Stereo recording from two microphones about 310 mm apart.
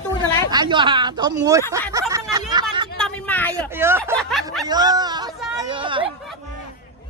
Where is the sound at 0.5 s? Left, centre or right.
Centre.